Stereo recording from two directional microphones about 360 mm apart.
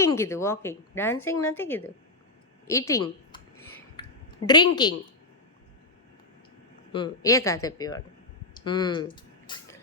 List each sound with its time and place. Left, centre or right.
0.0 s speech: centre
2.6 s a sound: centre
4.4 s speech: centre
6.9 s speech: centre